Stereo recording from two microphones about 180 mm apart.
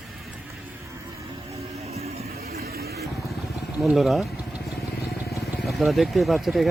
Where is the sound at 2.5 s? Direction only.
60° right (ahead or behind).